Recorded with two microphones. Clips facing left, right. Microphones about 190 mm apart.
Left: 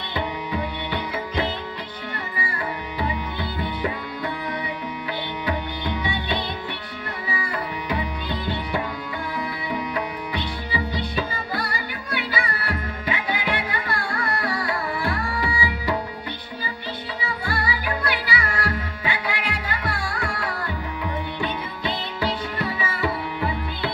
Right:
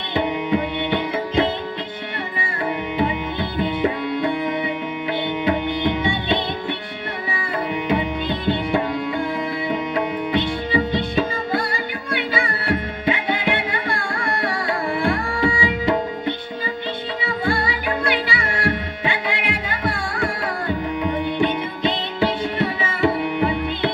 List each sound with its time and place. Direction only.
0.1 s music: 25° right (ahead or behind)
3.6 s tabla: 25° right (ahead or behind)
5.5 s music: 25° right (ahead or behind)
7.9 s tabla: 25° right (ahead or behind)
9.6 s music: 25° right (ahead or behind)
17.2 s music: 25° right (ahead or behind)